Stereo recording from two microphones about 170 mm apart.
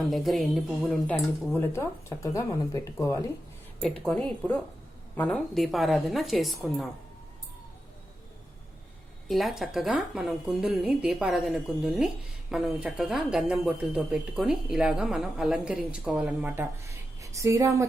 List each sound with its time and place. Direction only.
0.0 s a woman's voice: centre (ahead or behind); by 3.2 s 20° left (ahead or behind)
3.8 s a woman's voice: 5° left (ahead or behind)
9.2 s a woman's voice: centre (ahead or behind); by 17.8 s 20° right (ahead or behind)